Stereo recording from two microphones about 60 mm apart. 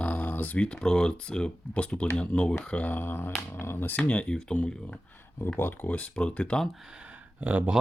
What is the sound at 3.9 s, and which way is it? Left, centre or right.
Speech, left.